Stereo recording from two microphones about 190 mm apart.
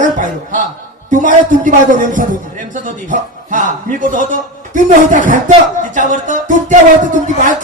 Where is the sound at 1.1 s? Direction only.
45° right (ahead or behind).